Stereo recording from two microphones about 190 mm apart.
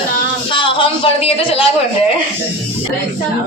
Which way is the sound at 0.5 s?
25° left (ahead or behind).